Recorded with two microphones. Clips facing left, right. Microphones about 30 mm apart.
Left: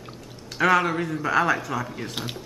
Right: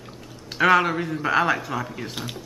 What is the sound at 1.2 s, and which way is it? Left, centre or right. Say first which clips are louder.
Speech: right 1 dB; centre.